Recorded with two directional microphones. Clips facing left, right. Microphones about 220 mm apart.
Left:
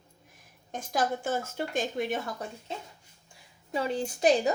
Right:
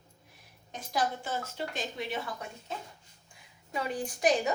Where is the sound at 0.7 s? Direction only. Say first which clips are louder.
Left 3 dB; 50° left (ahead or behind).